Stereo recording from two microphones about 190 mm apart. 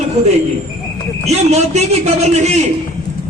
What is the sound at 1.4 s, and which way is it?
A man's voice, 35° right (ahead or behind).